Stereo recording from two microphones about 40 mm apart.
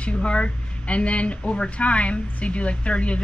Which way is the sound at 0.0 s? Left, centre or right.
Left.